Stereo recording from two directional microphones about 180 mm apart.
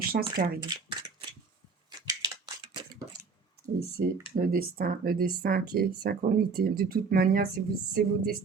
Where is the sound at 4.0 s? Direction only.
60° right (ahead or behind).